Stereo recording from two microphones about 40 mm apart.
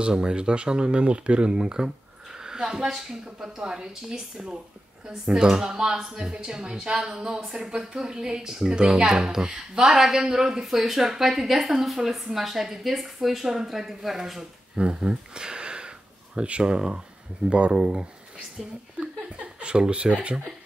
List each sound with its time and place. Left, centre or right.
0.0 s speech: right
2.3 s a sound: centre
2.9 s a woman's voice: centre
10.6 s a woman's voice: centre
14.8 s speech: right
18.6 s a woman's voice: centre
19.3 s speech: right